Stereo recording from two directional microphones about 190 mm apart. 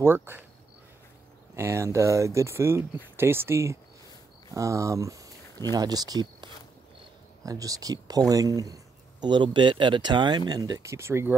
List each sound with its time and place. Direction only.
0.0 s speech: 10° right (ahead or behind)
1.5 s speech: 15° right (ahead or behind)